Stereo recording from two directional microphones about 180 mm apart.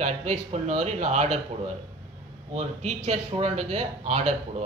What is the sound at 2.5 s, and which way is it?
Speech, 40° right (ahead or behind).